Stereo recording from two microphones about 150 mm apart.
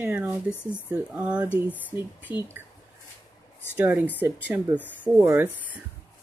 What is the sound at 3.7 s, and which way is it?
Speech, 15° right (ahead or behind).